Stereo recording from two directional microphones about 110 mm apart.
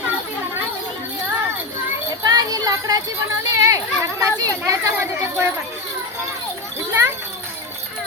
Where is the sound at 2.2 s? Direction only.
35° right (ahead or behind).